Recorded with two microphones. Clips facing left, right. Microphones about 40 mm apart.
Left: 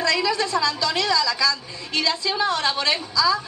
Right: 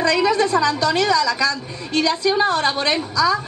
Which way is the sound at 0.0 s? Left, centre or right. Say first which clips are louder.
Right 5 dB; right.